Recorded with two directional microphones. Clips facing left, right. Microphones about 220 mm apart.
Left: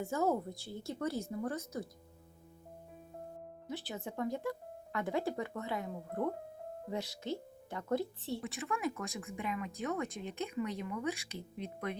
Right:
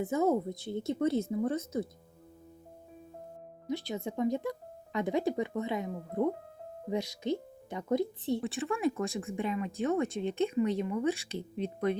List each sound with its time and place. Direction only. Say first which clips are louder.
0.0 s speech: right 5 dB; 20° right (ahead or behind)
3.7 s speech: right 7 dB; 15° right (ahead or behind)
8.4 s speech: right 6 dB; 30° right (ahead or behind)